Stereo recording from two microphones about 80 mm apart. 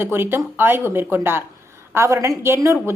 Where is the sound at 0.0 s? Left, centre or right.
Right.